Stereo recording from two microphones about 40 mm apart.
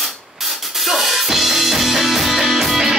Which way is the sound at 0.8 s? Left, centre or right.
Centre.